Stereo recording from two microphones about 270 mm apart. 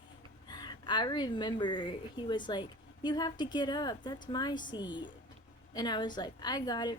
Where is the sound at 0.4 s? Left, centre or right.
Centre.